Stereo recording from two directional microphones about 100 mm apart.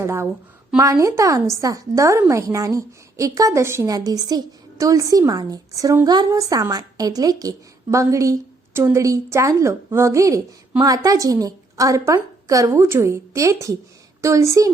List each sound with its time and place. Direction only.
0.0 s a woman's voice: 25° right (ahead or behind)
3.9 s a woman's voice: 40° right (ahead or behind)